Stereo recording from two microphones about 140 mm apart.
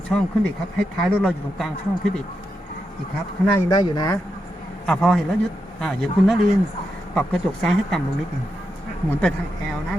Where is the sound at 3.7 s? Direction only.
30° left (ahead or behind).